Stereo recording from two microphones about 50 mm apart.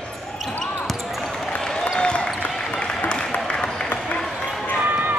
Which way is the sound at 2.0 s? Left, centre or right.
Centre.